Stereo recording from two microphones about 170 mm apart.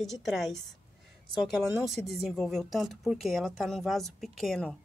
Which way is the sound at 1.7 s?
Centre (ahead or behind).